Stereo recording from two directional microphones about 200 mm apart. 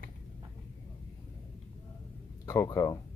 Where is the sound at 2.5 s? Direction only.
15° left (ahead or behind).